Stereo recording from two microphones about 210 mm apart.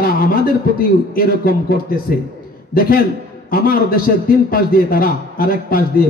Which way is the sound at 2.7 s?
45° left (ahead or behind).